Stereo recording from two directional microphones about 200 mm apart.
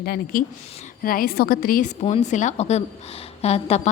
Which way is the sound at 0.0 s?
50° left (ahead or behind).